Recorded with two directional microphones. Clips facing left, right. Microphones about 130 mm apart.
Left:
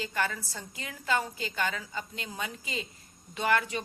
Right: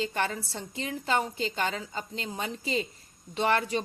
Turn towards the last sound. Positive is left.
turn(degrees=-30)  # may be behind; listen again after turning